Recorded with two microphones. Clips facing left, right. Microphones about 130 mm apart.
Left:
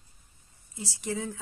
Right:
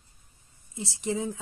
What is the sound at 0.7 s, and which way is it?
Speech, 25° right (ahead or behind).